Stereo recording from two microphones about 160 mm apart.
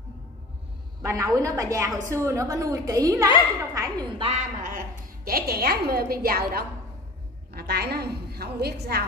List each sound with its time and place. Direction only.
1.0 s a woman's voice: 20° right (ahead or behind)
4.2 s a woman's voice: 45° right (ahead or behind); by 6.6 s 70° right (ahead or behind)
7.5 s a woman's voice: 85° right